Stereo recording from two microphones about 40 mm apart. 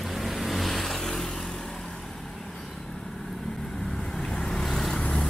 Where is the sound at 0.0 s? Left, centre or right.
Centre.